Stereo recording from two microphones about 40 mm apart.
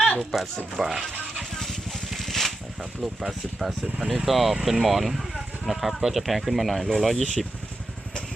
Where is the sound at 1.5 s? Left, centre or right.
Centre.